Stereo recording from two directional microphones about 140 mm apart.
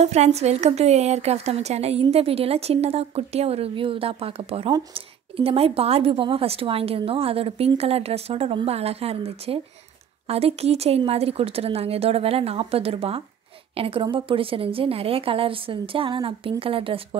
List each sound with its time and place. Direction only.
0.0 s a woman's voice: 50° right (ahead or behind)